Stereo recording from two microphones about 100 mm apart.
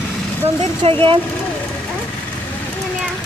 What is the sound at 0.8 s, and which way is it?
Speech, 60° right (ahead or behind).